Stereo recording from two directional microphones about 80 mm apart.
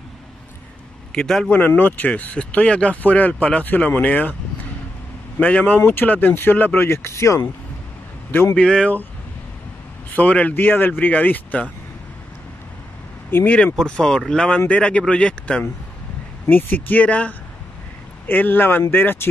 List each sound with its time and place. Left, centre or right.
1.1 s speech: centre
1.8 s speech: centre
5.4 s speech: centre; by 7.4 s left
8.5 s speech: centre
10.1 s speech: centre
13.3 s speech: left
13.7 s speech: centre
16.4 s speech: left